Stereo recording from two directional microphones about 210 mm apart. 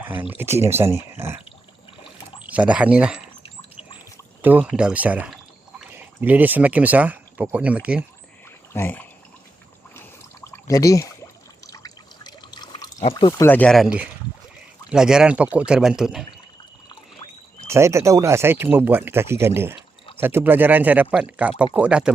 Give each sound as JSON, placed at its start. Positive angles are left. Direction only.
{"t": 0.0, "sound": "speech", "side_deg": -10}
{"t": 2.5, "sound": "speech", "side_deg": -5}
{"t": 3.4, "sound": "a sound", "side_deg": 25}
{"t": 4.4, "sound": "speech", "side_deg": -5}
{"t": 8.7, "sound": "speech", "side_deg": 10}
{"t": 10.4, "sound": "a sound", "side_deg": 15}
{"t": 11.6, "sound": "drip", "side_deg": 15}
{"t": 13.0, "sound": "speech", "side_deg": 25}
{"t": 13.5, "sound": "speech", "side_deg": 5}
{"t": 17.7, "sound": "speech", "side_deg": -15}